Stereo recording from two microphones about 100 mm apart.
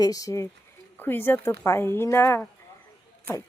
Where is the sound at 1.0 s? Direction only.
20° left (ahead or behind).